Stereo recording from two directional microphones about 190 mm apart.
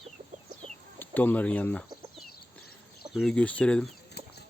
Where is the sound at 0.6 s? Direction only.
10° left (ahead or behind).